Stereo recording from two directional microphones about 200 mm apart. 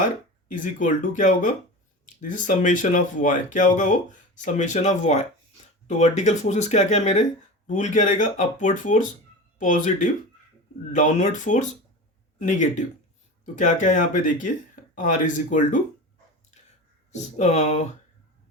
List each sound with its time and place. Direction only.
0.4 s speech: 40° left (ahead or behind)
17.1 s speech: 35° left (ahead or behind)